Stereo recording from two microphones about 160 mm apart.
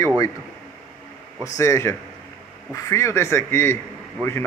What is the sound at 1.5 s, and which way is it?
A man's voice, 20° left (ahead or behind).